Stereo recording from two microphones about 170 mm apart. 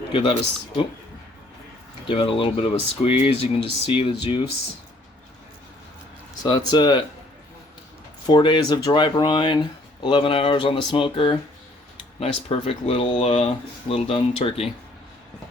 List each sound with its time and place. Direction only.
0.1 s speech: 30° left (ahead or behind)
2.0 s speech: 30° left (ahead or behind)
6.7 s speech: 25° left (ahead or behind)
8.3 s speech: 25° left (ahead or behind)